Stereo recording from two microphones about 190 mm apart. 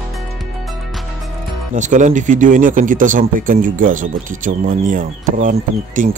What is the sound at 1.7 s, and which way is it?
Speech, 40° right (ahead or behind).